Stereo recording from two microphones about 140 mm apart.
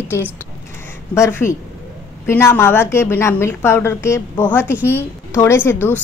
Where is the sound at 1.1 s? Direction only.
20° left (ahead or behind).